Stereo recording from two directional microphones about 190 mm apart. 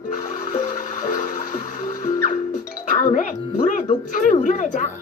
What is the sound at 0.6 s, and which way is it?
Music, 20° left (ahead or behind).